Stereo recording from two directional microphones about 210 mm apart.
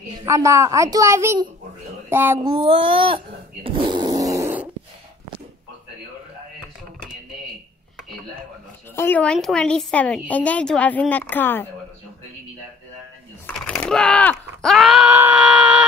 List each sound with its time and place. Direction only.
0.2 s a child's voice: 15° right (ahead or behind)
2.4 s child singing: 25° right (ahead or behind)
3.6 s fart: 25° right (ahead or behind)
8.9 s a woman's voice: 10° left (ahead or behind)
13.5 s typing: 5° left (ahead or behind)
14.6 s wail: centre (ahead or behind)